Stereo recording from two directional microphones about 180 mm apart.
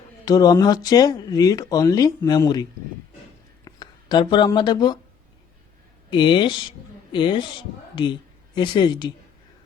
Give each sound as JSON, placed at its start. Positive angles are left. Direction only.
{"t": 0.3, "sound": "speech", "side_deg": 20}
{"t": 6.1, "sound": "speech", "side_deg": 25}
{"t": 8.5, "sound": "speech", "side_deg": 25}